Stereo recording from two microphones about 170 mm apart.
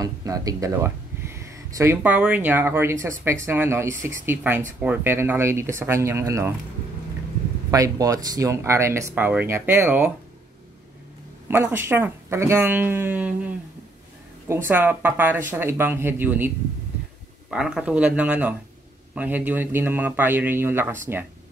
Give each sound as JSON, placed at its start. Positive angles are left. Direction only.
{"t": 0.0, "sound": "speech", "side_deg": -20}
{"t": 7.7, "sound": "speech", "side_deg": -20}
{"t": 11.4, "sound": "speech", "side_deg": -15}
{"t": 14.7, "sound": "speech", "side_deg": -10}